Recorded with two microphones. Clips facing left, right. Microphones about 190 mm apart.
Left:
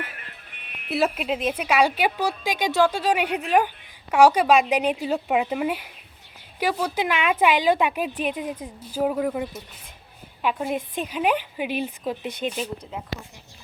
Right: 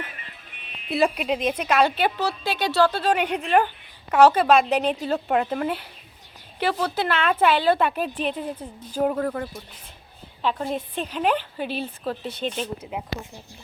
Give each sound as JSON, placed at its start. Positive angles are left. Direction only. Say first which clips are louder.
{"t": 0.2, "sound": "music", "louder": "even", "side_deg": 55}
{"t": 0.9, "sound": "a woman's voice", "louder": "right 1 dB", "side_deg": 5}
{"t": 12.9, "sound": "speech", "louder": "right 3 dB", "side_deg": -10}